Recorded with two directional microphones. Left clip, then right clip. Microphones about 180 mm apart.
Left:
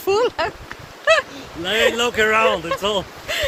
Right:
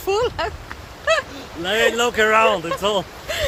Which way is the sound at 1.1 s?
30° left (ahead or behind).